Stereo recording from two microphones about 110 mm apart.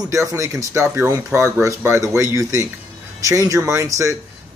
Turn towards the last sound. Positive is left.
turn(degrees=-25)  # may be behind; listen again after turning